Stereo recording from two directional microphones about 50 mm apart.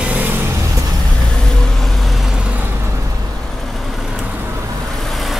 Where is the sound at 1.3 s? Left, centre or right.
Centre.